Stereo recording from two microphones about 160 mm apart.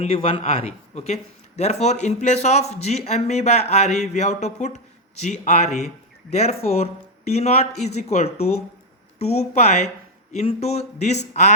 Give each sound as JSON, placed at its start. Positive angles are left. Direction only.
{"t": 0.0, "sound": "speech", "side_deg": 40}